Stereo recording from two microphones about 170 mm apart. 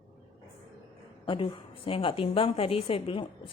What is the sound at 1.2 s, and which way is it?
A woman's voice, 30° left (ahead or behind).